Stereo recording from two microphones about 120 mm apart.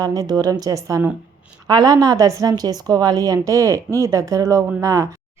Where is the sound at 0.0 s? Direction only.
30° right (ahead or behind).